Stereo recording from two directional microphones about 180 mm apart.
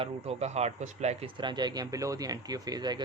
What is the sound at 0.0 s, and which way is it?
Speech, 35° right (ahead or behind).